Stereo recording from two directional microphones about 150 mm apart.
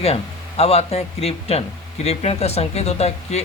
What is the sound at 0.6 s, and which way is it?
Speech, 45° left (ahead or behind).